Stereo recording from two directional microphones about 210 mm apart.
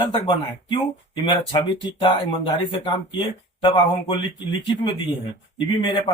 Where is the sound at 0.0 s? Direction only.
25° left (ahead or behind).